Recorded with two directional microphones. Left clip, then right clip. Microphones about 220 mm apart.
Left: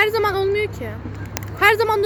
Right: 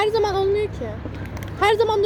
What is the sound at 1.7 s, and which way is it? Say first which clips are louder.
Speech: left 1 dB; 30° left (ahead or behind).